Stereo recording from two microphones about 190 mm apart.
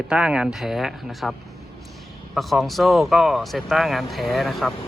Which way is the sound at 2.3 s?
Centre (ahead or behind).